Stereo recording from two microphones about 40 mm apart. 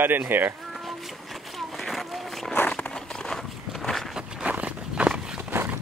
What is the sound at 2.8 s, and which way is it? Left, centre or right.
Crumpling, centre.